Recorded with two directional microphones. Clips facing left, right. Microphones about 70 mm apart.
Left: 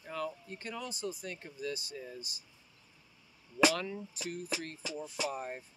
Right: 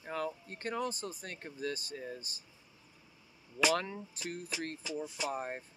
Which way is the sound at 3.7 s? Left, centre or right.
Right.